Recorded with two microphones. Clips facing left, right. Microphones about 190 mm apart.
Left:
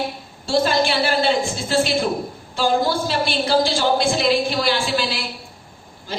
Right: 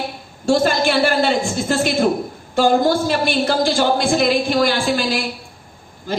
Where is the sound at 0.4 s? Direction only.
50° right (ahead or behind).